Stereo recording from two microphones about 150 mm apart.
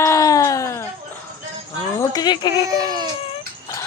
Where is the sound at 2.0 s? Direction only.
25° left (ahead or behind).